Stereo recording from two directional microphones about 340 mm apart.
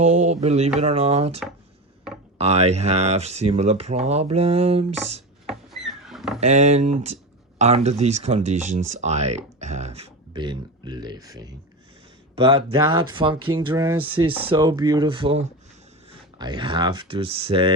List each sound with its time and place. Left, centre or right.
0.0 s speech: centre
2.4 s speech: centre
5.5 s vehicle: centre
6.4 s speech: centre